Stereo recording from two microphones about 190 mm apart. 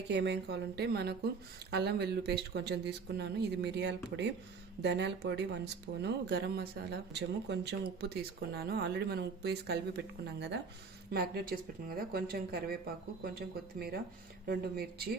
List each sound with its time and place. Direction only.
0.1 s speech: 65° right (ahead or behind)
11.1 s speech: 55° right (ahead or behind)